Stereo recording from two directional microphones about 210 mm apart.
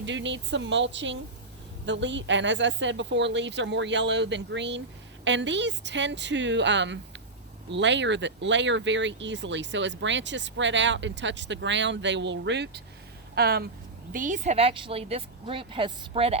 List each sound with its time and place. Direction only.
0.0 s speech: 60° right (ahead or behind)
14.1 s speech: 40° right (ahead or behind)